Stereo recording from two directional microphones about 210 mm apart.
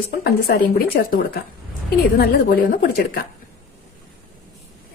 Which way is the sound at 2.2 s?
45° left (ahead or behind).